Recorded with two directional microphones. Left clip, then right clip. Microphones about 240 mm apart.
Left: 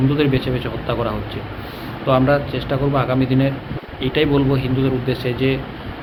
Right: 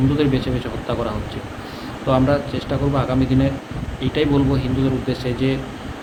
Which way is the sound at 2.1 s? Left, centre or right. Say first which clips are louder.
Left 2 dB; centre.